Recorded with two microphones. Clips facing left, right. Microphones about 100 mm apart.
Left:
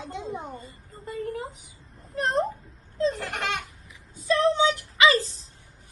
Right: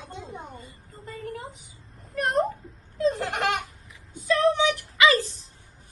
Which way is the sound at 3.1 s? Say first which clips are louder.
Right 4 dB; 25° right (ahead or behind).